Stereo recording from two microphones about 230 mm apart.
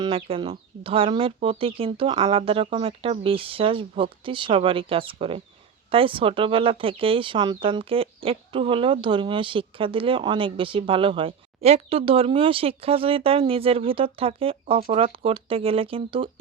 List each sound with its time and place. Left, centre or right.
0.0 s speech: right